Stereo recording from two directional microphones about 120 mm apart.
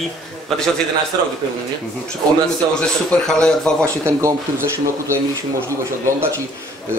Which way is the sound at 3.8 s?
20° right (ahead or behind).